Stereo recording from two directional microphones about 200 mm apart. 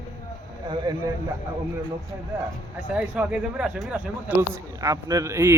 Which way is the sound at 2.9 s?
5° right (ahead or behind).